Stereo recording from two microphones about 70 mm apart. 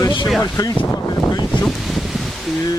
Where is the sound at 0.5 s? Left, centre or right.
Left.